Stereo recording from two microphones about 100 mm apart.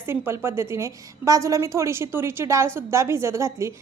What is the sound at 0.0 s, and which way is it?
A woman's voice, 25° right (ahead or behind).